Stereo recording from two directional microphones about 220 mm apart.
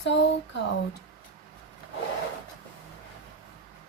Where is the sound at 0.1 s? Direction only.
55° left (ahead or behind).